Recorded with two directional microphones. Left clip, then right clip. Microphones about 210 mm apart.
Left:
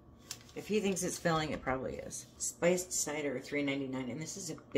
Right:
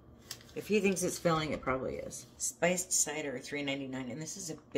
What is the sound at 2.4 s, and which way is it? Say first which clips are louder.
Speech: even; 15° right (ahead or behind).